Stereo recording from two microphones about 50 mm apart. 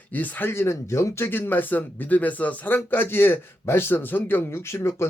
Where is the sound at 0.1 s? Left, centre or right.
Left.